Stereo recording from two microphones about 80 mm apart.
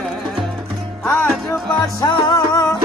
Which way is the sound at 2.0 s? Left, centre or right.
Left.